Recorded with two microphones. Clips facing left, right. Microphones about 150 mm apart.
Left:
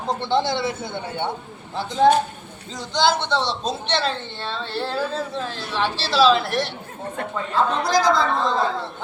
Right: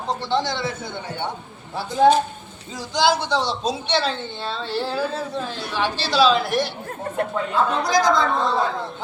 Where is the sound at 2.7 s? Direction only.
5° right (ahead or behind).